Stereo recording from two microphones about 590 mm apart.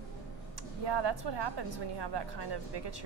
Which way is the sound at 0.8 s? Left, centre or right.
Right.